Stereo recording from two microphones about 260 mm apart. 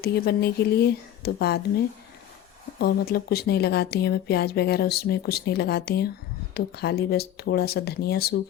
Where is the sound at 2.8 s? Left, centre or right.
Left.